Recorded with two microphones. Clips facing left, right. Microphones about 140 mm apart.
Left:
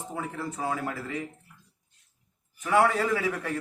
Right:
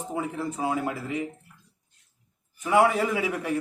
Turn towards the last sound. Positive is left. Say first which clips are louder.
# right 1 dB
turn(degrees=-15)  # may be behind; listen again after turning